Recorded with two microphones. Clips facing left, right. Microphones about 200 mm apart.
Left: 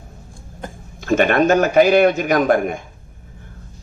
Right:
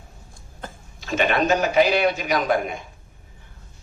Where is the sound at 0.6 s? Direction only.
15° left (ahead or behind).